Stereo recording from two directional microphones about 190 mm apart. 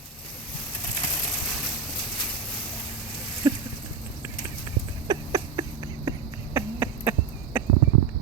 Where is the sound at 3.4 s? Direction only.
15° right (ahead or behind).